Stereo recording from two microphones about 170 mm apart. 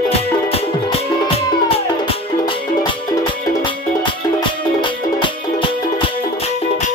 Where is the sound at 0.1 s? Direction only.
35° left (ahead or behind).